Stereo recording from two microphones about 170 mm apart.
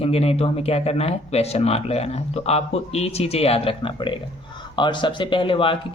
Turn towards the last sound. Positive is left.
turn(degrees=30)  # may be behind; listen again after turning